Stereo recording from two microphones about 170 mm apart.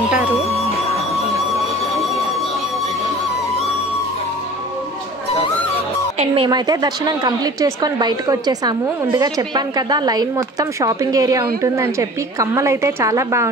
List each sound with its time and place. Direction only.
6.1 s a woman's voice: 30° right (ahead or behind)